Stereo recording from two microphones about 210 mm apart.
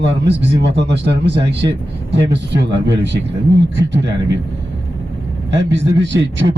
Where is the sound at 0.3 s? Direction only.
55° right (ahead or behind).